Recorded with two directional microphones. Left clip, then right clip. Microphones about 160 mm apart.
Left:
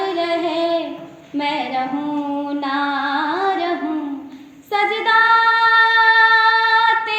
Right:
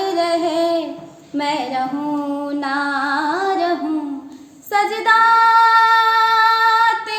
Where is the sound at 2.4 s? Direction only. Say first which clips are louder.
Even; 15° right (ahead or behind).